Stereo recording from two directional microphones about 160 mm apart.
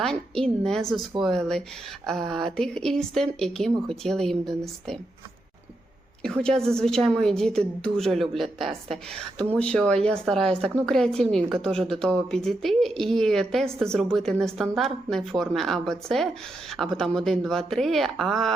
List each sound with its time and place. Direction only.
0.0 s a woman's voice: 5° left (ahead or behind)
6.2 s speech: 5° left (ahead or behind)